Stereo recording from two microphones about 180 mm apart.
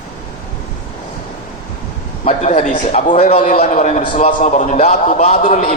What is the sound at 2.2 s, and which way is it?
A man's voice, 40° left (ahead or behind).